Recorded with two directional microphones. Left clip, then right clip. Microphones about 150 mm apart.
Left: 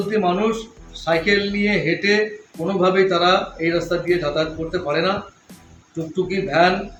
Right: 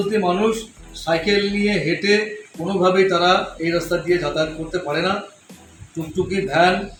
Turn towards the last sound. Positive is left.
turn(degrees=5)  # may be behind; listen again after turning